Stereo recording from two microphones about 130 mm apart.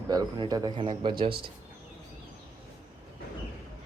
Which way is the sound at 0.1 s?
30° right (ahead or behind).